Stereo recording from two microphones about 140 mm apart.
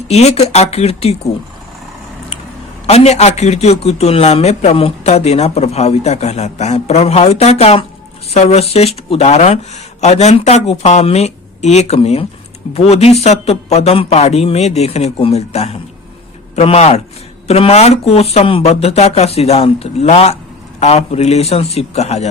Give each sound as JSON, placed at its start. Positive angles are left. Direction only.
{"t": 0.1, "sound": "a man's voice", "side_deg": 50}
{"t": 2.8, "sound": "a man's voice", "side_deg": 50}